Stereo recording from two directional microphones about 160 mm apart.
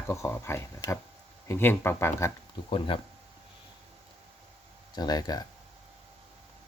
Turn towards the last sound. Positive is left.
turn(degrees=25)  # may be behind; listen again after turning